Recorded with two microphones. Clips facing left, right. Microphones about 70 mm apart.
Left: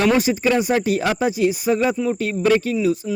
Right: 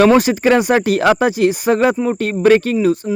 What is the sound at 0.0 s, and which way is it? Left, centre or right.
Speech, right.